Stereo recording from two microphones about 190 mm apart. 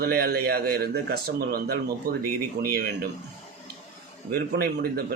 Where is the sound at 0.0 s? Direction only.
55° right (ahead or behind).